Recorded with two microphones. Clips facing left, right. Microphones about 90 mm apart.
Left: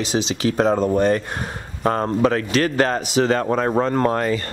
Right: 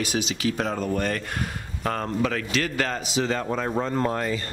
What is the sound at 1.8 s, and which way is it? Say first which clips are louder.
A man's voice: left 7 dB; 35° left (ahead or behind).